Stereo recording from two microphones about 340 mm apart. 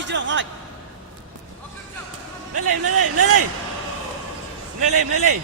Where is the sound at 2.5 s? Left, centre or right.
Right.